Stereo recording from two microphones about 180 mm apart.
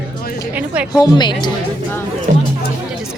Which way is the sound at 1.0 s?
25° left (ahead or behind).